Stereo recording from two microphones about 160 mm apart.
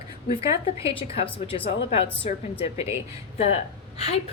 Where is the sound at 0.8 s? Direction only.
35° left (ahead or behind).